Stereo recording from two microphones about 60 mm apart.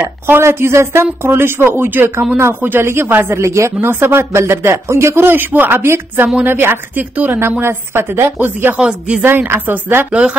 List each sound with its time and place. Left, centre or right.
0.0 s speech: right
7.0 s speech: right
7.6 s speech: right
8.7 s speech: centre
9.2 s speech: right